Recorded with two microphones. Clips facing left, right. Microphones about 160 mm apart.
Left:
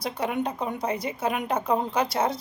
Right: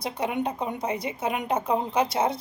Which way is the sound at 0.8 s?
25° right (ahead or behind).